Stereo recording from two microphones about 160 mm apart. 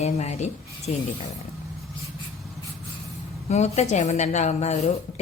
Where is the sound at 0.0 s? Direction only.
40° left (ahead or behind).